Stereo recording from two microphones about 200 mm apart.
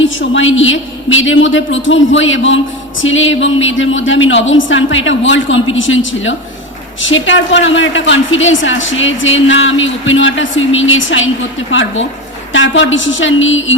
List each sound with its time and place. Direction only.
0.0 s a woman's voice: 70° left (ahead or behind)